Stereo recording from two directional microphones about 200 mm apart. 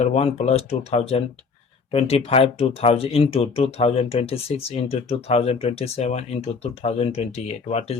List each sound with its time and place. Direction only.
0.0 s speech: 30° left (ahead or behind)